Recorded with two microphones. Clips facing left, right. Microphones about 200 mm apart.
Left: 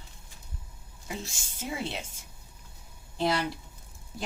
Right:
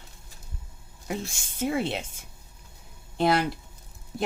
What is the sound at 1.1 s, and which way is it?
Speech, 60° right (ahead or behind).